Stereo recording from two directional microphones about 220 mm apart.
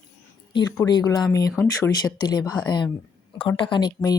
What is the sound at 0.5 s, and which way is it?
Speech, 20° left (ahead or behind).